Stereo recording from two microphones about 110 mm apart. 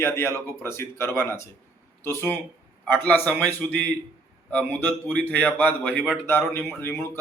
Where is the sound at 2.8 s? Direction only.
15° left (ahead or behind).